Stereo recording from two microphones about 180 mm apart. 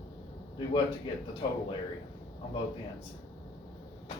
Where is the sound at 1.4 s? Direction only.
35° left (ahead or behind).